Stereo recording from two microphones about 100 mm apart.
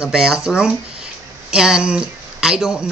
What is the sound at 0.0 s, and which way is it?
Speech, 5° right (ahead or behind).